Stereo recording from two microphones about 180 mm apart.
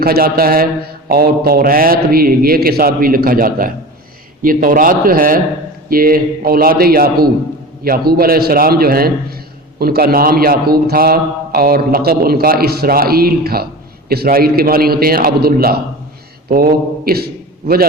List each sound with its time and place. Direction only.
0.0 s a man's voice: 55° right (ahead or behind)